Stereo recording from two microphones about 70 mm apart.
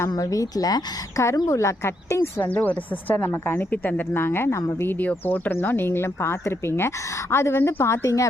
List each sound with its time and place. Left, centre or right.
0.0 s a woman's voice: left
1.5 s a woman's voice: left
2.4 s speech: left